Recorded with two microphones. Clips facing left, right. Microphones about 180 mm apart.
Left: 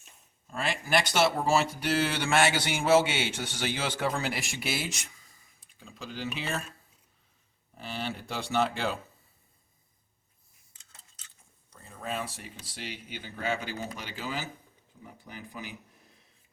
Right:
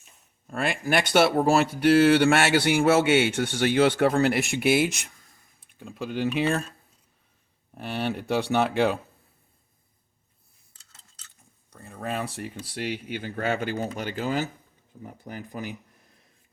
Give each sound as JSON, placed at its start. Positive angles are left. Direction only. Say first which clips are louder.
{"t": 0.5, "sound": "speech", "louder": "right 4 dB", "side_deg": -55}
{"t": 7.8, "sound": "speech", "louder": "right 7 dB", "side_deg": -60}
{"t": 11.8, "sound": "speech", "louder": "right 4 dB", "side_deg": -60}